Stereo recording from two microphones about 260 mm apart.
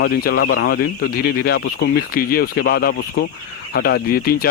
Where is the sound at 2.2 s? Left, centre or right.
Left.